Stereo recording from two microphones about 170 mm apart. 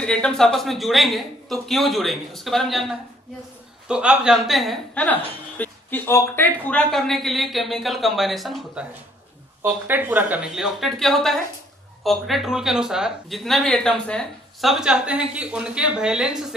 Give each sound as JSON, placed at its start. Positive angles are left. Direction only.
{"t": 0.0, "sound": "a woman's voice", "side_deg": 5}
{"t": 9.6, "sound": "a woman's voice", "side_deg": -10}